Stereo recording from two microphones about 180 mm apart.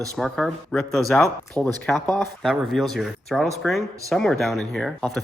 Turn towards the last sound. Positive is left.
turn(degrees=0)  # may be behind; listen again after turning